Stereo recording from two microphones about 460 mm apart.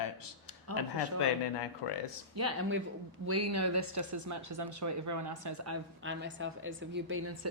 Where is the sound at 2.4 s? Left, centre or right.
Right.